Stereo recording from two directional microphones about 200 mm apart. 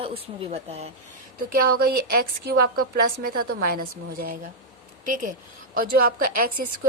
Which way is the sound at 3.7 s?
50° right (ahead or behind).